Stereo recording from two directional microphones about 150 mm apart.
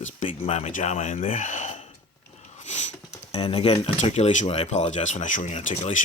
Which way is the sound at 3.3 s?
40° left (ahead or behind).